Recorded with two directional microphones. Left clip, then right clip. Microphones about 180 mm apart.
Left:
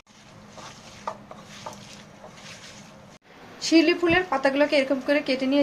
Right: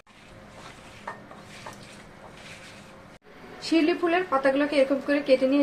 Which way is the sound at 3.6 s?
25° left (ahead or behind).